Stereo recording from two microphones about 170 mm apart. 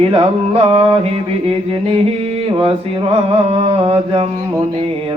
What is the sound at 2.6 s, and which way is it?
Mantra, 35° right (ahead or behind).